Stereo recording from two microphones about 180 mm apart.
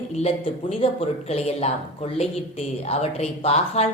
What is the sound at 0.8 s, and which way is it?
A woman's voice, 35° left (ahead or behind).